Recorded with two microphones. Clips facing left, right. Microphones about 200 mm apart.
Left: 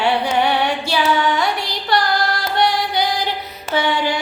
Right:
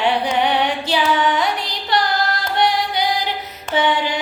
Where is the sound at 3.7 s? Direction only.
15° right (ahead or behind).